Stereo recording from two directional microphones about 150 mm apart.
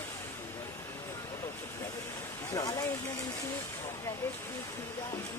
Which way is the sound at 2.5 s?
25° left (ahead or behind).